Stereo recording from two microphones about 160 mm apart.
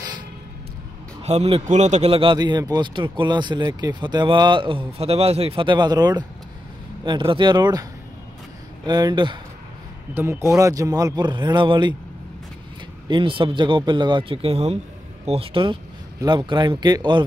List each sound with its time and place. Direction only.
1.2 s speech: 40° right (ahead or behind); by 7.8 s 25° right (ahead or behind)
8.8 s speech: 25° right (ahead or behind)
10.1 s speech: 15° right (ahead or behind)
13.1 s speech: 30° right (ahead or behind)